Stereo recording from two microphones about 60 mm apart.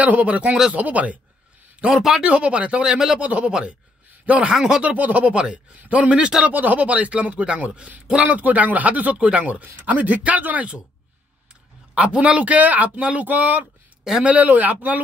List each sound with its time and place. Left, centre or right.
0.0 s speech: right
1.8 s speech: centre
2.2 s speech: centre
4.9 s speech: right
6.5 s speech: right
11.9 s speech: centre